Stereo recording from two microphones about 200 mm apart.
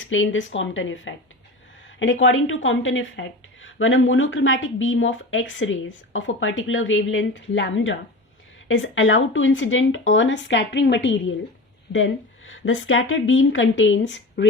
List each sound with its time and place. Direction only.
0.0 s a woman's voice: 80° left
2.2 s a woman's voice: 70° left (ahead or behind)